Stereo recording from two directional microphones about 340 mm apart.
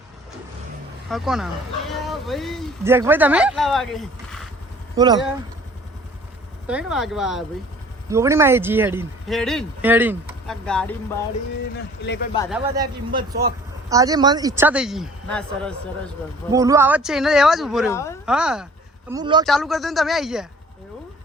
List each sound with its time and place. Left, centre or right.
1.1 s speech: centre
4.9 s speech: centre
6.7 s speech: centre
12.0 s a man's voice: left
12.5 s speech: centre
13.9 s speech: centre
16.5 s speech: centre
18.3 s speech: centre
19.5 s speech: centre